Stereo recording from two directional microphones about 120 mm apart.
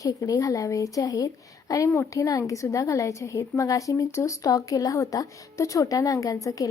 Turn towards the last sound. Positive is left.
turn(degrees=30)  # may be behind; listen again after turning